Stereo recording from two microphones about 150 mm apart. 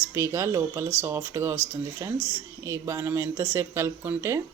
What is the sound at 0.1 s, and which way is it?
Speech, 20° right (ahead or behind).